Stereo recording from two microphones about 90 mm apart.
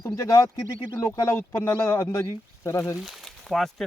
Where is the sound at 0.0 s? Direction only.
35° left (ahead or behind).